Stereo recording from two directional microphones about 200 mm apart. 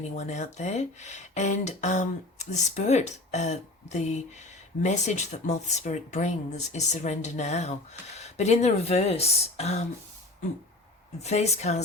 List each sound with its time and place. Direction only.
0.2 s speech: 35° left (ahead or behind)
11.2 s speech: 35° left (ahead or behind)